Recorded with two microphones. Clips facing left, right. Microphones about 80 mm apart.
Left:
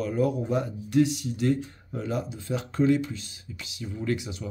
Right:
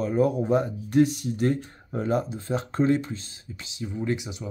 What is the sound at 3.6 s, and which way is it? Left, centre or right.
Speech, right.